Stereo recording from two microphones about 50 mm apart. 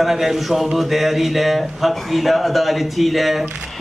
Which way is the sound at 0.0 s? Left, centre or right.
Centre.